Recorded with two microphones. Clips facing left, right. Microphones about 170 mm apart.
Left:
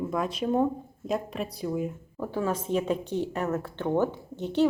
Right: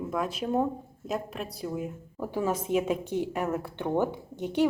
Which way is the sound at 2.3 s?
15° right (ahead or behind).